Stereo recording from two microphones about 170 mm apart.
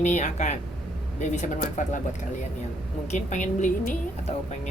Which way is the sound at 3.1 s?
45° left (ahead or behind).